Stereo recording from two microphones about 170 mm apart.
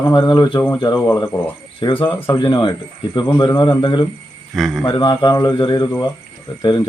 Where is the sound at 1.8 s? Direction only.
25° left (ahead or behind).